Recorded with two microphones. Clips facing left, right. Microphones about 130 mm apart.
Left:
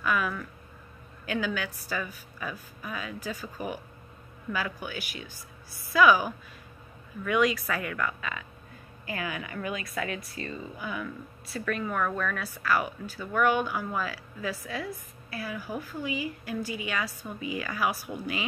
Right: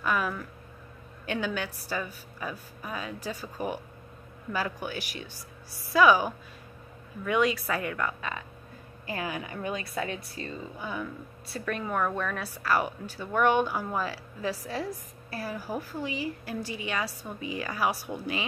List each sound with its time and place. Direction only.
0.0 s a woman's voice: 35° right (ahead or behind)
12.0 s a woman's voice: 10° right (ahead or behind)
12.4 s a woman's voice: 35° right (ahead or behind)